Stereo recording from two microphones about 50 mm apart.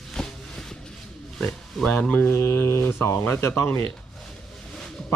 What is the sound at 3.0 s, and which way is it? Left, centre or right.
Speech, left.